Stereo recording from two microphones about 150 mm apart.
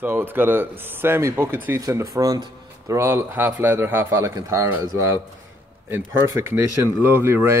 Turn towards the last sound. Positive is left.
turn(degrees=-15)  # may be behind; listen again after turning